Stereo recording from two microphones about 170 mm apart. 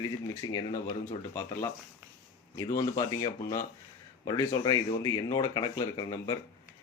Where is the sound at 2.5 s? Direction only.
20° left (ahead or behind).